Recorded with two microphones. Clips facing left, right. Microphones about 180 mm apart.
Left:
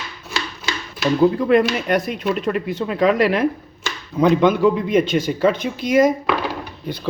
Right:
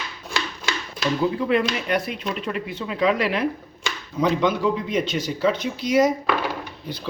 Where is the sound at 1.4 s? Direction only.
45° left (ahead or behind).